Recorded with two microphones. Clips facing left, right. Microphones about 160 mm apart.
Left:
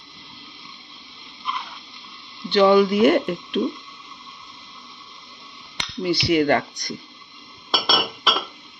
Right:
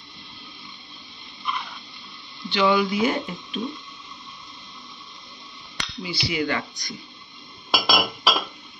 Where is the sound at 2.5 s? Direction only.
50° left (ahead or behind).